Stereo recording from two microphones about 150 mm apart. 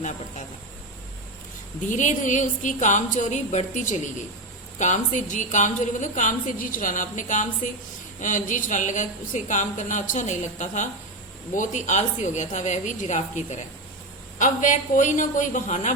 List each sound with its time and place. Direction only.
1.9 s a woman's voice: 55° left (ahead or behind)